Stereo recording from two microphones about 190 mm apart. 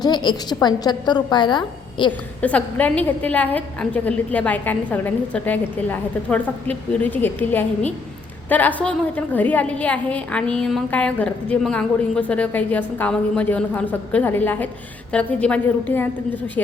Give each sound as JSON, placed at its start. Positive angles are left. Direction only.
{"t": 0.0, "sound": "a woman's voice", "side_deg": 25}
{"t": 2.4, "sound": "a woman's voice", "side_deg": 5}